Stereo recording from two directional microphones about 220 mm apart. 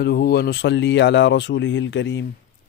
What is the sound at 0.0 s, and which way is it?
Speech, 45° left (ahead or behind).